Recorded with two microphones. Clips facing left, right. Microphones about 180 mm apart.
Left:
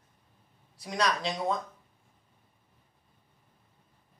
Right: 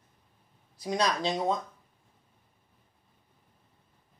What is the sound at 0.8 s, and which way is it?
Speech, 25° right (ahead or behind).